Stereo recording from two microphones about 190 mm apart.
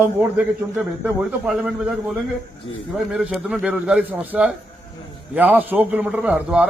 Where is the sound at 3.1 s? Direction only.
5° right (ahead or behind).